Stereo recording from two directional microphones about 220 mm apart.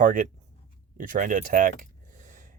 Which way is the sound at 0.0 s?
35° right (ahead or behind).